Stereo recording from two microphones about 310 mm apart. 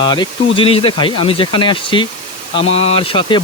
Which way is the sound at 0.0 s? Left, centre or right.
Centre.